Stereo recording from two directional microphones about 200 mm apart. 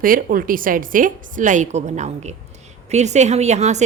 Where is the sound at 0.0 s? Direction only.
45° right (ahead or behind).